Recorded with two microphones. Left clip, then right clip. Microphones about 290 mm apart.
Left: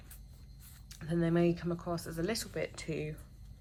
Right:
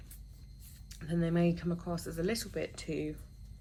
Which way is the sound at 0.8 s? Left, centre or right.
Centre.